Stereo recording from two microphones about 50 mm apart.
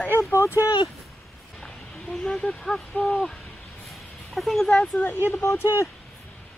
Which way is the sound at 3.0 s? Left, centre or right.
Centre.